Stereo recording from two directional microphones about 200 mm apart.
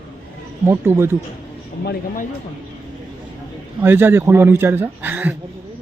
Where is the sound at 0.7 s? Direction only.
10° right (ahead or behind).